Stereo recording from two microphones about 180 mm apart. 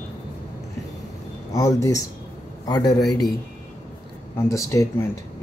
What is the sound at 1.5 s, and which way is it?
Speech, 20° left (ahead or behind).